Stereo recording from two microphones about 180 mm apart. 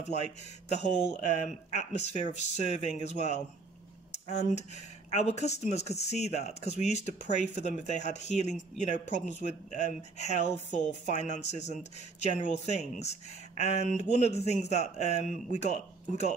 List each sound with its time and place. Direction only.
0.0 s speech: 40° left (ahead or behind)